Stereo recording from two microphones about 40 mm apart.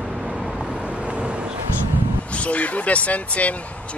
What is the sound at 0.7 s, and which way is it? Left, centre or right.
Vehicle, right.